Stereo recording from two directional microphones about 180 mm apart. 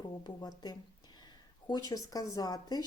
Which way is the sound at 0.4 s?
20° left (ahead or behind).